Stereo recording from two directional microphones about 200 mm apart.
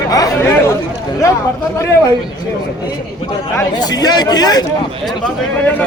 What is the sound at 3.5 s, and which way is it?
A man's voice, 20° left (ahead or behind).